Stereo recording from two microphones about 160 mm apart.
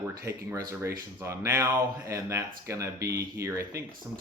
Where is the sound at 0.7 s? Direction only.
15° right (ahead or behind).